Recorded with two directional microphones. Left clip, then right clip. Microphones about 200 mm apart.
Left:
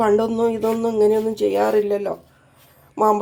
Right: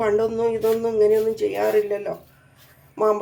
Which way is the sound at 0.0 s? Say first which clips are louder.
Left 3 dB; 35° left (ahead or behind).